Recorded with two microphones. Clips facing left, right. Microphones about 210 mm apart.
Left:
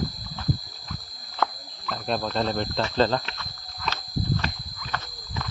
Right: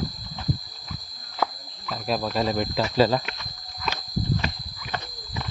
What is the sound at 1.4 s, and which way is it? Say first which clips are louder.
Cricket: even; 5° right (ahead or behind).